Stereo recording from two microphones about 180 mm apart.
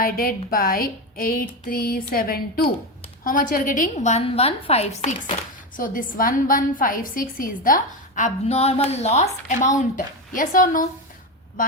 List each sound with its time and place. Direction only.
0.0 s a woman's voice: 55° left (ahead or behind); by 5.1 s 35° left (ahead or behind)
5.4 s a woman's voice: 50° left (ahead or behind)